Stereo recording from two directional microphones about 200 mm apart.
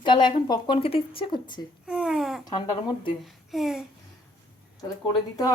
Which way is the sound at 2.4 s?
20° left (ahead or behind).